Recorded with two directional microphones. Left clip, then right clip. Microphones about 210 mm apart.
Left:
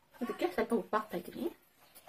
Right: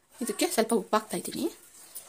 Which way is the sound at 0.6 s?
55° right (ahead or behind).